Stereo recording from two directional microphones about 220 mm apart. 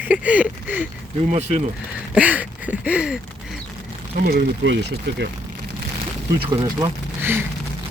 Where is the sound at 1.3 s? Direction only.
30° right (ahead or behind).